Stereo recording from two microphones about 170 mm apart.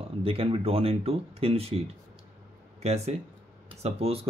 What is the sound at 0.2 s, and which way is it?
Speech, 35° right (ahead or behind).